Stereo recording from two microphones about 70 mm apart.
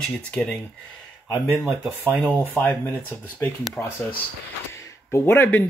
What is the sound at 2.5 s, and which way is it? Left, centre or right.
Speech, left.